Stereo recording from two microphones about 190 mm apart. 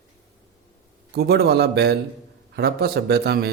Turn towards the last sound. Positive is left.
turn(degrees=-55)  # may be behind; listen again after turning